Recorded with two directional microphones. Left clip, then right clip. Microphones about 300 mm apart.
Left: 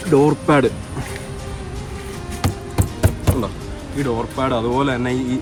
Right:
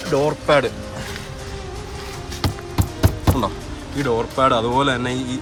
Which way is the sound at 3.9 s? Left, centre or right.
Centre.